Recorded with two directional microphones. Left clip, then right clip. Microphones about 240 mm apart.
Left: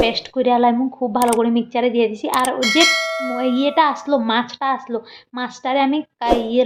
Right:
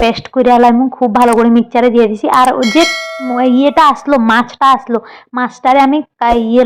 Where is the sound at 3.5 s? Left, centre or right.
Right.